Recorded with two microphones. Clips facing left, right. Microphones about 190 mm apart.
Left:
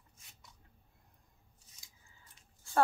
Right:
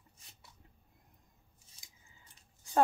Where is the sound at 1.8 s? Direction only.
20° right (ahead or behind).